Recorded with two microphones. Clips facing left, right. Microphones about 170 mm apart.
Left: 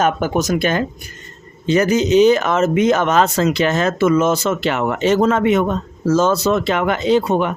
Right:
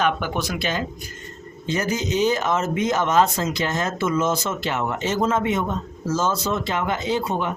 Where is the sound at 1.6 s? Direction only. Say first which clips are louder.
Left 9 dB; 75° left (ahead or behind).